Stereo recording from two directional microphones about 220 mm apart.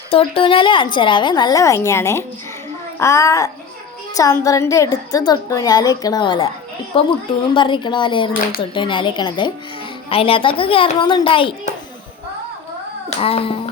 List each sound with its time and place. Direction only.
0.1 s a woman's voice: 25° left (ahead or behind)
7.5 s a woman's voice: 20° left (ahead or behind)
13.1 s a woman's voice: 25° left (ahead or behind)